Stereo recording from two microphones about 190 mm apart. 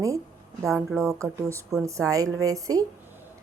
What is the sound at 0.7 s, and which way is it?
Speech, centre (ahead or behind).